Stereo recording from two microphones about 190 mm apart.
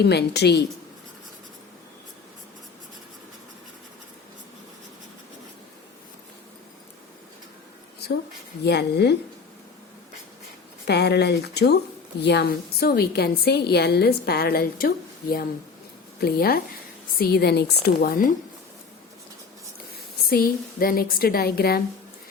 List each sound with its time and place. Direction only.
0.0 s a woman's voice: 60° left (ahead or behind)
8.6 s a woman's voice: 60° left (ahead or behind)
10.8 s a woman's voice: 60° left (ahead or behind)
20.2 s a woman's voice: 50° left (ahead or behind)